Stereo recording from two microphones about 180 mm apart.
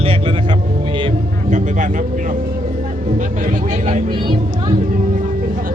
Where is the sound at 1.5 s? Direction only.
45° right (ahead or behind).